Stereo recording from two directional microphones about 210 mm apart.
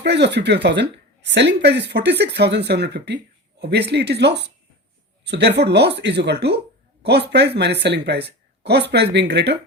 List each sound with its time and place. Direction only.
0.0 s speech: 55° right (ahead or behind)